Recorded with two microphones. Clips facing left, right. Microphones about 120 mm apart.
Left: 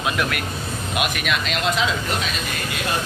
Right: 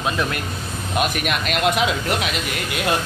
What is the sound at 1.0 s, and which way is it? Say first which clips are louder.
Speech: right 3 dB; 45° right (ahead or behind).